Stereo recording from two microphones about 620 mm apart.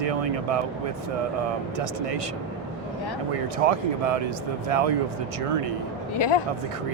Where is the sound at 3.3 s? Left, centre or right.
Right.